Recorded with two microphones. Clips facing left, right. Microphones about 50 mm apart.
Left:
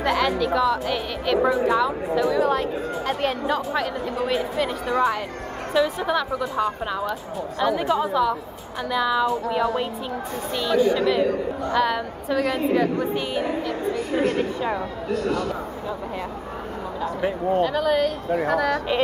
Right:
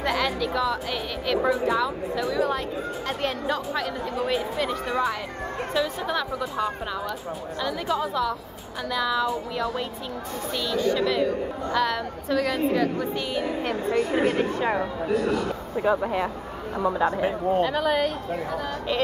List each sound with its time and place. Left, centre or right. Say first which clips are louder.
0.0 s a woman's voice: left 4 dB; centre
14.1 s speech: left 1 dB; centre
16.0 s speech: right 5 dB; right
17.0 s speech: left 3 dB; centre
18.5 s speech: left 8 dB; left